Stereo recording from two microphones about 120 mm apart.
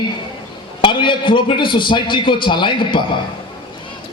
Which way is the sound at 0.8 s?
45° left (ahead or behind).